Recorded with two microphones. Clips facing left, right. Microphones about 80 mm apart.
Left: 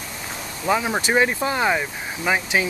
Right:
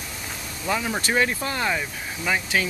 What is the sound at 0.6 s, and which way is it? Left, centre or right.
Speech, left.